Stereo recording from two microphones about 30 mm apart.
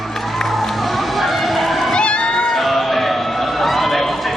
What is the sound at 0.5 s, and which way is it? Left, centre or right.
Music, centre.